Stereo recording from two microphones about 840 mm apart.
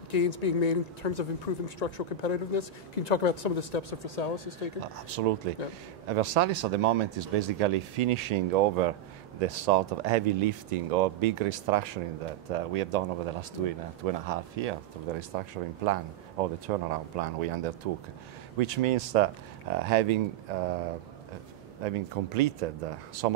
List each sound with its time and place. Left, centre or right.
0.1 s speech: left
4.9 s speech: right
21.8 s speech: right